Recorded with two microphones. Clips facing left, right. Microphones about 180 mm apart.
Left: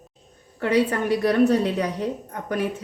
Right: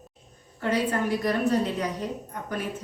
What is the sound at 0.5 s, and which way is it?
A woman's voice, 70° left (ahead or behind).